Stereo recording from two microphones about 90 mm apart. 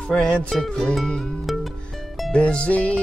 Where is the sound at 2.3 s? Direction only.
10° left (ahead or behind).